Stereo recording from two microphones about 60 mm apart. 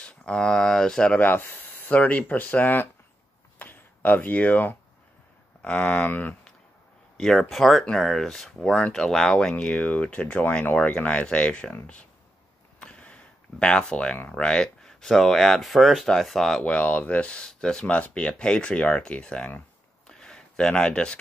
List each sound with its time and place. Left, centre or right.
0.0 s speech: centre
1.2 s speech: left
3.5 s a sound: left
5.6 s speech: centre
6.0 s speech: left
7.2 s speech: centre
9.8 s speech: left
12.7 s a sound: centre
14.3 s speech: centre
16.6 s speech: left
20.1 s a sound: centre